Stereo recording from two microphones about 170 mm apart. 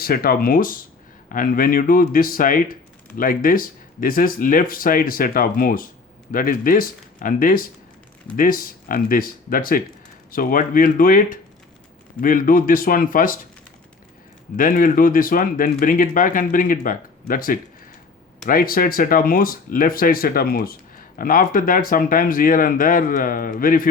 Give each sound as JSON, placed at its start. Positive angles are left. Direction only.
{"t": 0.0, "sound": "speech", "side_deg": 60}
{"t": 14.5, "sound": "speech", "side_deg": 55}